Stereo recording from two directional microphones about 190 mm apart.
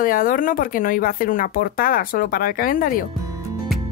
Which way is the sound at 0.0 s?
45° left (ahead or behind).